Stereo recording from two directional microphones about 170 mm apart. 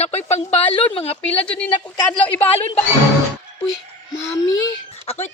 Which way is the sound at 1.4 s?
5° left (ahead or behind).